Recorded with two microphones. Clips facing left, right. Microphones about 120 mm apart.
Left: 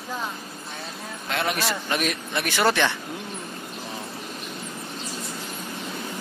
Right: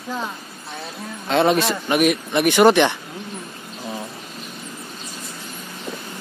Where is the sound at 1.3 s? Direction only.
25° right (ahead or behind).